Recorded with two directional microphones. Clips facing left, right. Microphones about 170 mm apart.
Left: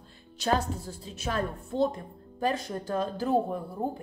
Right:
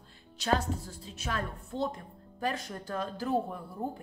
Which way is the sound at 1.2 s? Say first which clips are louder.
Left 5 dB; 35° left (ahead or behind).